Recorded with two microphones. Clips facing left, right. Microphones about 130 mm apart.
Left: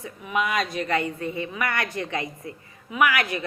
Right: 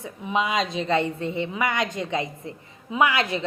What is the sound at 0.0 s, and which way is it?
A woman's voice, 25° right (ahead or behind).